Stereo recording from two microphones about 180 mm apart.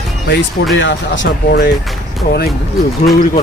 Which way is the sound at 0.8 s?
90° left.